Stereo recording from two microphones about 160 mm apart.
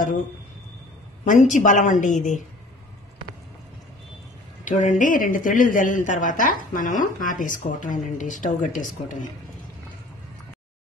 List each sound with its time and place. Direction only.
1.2 s a woman's voice: 50° left (ahead or behind)
4.6 s speech: 50° left (ahead or behind)